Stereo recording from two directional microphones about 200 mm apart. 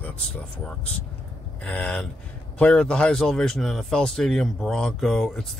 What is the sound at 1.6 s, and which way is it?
Speech, 5° left (ahead or behind).